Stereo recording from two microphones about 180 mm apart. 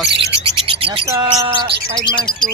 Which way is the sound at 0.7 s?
30° right (ahead or behind).